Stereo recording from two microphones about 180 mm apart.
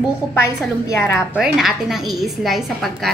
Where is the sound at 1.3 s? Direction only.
Centre (ahead or behind).